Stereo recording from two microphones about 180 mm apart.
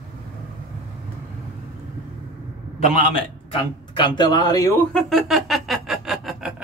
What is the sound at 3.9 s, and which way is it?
Speech, 25° left (ahead or behind).